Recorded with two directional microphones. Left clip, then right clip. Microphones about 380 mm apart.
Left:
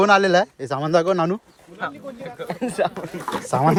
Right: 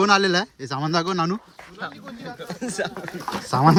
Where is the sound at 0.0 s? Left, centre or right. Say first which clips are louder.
Left 3 dB; centre.